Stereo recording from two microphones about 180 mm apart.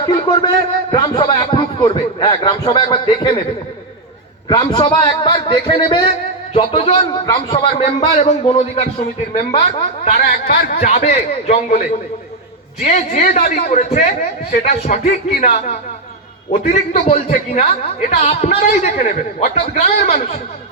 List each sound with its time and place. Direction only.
0.0 s a man's voice: 25° left (ahead or behind)
4.4 s a man's voice: 25° left (ahead or behind)
9.3 s a man's voice: 40° left (ahead or behind); by 10.8 s 55° left (ahead or behind)
10.8 s a man's voice: 40° left (ahead or behind)
16.5 s a man's voice: 35° left (ahead or behind)